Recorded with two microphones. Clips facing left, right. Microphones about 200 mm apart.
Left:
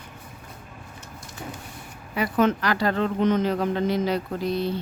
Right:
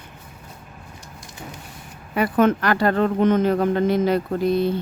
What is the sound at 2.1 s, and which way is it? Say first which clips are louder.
Speech: right 4 dB; 55° right (ahead or behind).